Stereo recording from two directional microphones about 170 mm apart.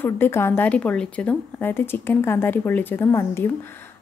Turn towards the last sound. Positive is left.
turn(degrees=15)  # may be behind; listen again after turning